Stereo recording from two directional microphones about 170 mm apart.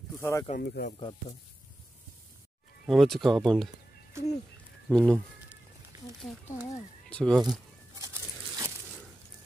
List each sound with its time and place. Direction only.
0.2 s speech: 15° left (ahead or behind)
0.6 s speech: 65° left (ahead or behind)
2.9 s speech: centre (ahead or behind)
4.1 s a sound: 15° right (ahead or behind)
4.8 s speech: 5° left (ahead or behind)
6.4 s speech: 10° left (ahead or behind)
7.9 s a sound: 20° right (ahead or behind)